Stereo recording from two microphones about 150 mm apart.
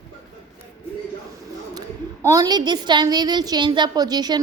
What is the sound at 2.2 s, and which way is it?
A woman's voice, 25° right (ahead or behind).